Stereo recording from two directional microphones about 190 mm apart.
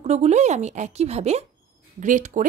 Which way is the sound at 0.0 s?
35° right (ahead or behind).